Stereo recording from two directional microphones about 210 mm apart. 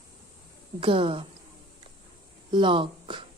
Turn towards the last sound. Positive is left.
turn(degrees=-25)  # may be behind; listen again after turning